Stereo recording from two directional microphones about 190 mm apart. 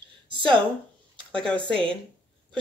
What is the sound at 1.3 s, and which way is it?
Speech, 5° left (ahead or behind).